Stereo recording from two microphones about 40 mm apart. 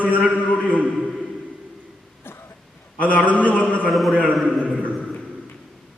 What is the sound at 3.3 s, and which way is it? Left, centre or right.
Speech, left.